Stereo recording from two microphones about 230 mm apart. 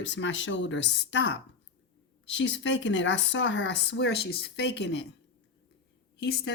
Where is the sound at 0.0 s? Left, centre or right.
Left.